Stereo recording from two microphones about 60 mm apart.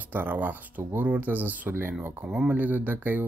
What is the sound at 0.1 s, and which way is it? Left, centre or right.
Speech, right.